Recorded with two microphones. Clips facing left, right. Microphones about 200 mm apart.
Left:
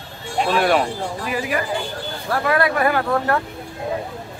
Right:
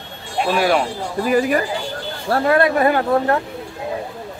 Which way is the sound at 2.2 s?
30° right (ahead or behind).